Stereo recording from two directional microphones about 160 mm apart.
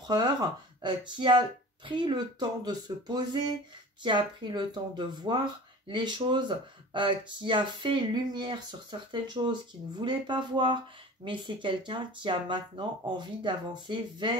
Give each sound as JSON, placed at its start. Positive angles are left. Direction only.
{"t": 0.0, "sound": "speech", "side_deg": -25}